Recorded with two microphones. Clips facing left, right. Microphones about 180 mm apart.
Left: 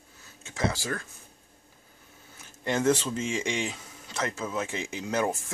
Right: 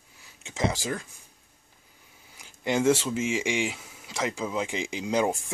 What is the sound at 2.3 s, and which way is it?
Speech, 15° right (ahead or behind).